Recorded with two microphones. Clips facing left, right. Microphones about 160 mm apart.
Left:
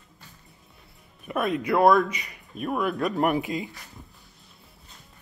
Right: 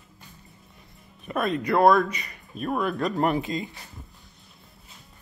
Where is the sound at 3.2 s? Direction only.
15° left (ahead or behind).